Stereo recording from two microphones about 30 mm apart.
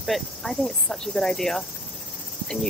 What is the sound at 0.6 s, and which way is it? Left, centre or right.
Speech, centre.